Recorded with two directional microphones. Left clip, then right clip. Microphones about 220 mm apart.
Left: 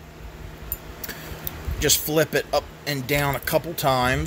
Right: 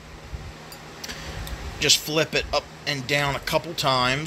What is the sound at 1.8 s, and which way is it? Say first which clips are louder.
Speech: even; 20° left (ahead or behind).